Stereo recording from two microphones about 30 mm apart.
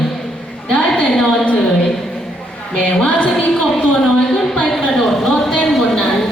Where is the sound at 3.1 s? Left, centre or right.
Left.